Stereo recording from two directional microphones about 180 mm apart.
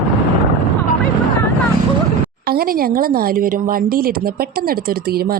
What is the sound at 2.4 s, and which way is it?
Speech, 55° right (ahead or behind).